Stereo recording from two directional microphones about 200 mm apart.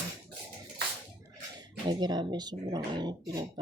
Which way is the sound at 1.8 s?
20° right (ahead or behind).